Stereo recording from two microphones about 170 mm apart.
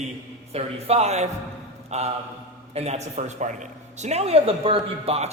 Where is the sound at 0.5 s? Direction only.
40° right (ahead or behind).